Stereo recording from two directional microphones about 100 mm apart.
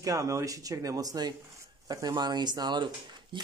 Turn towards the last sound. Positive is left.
turn(degrees=-55)  # may be behind; listen again after turning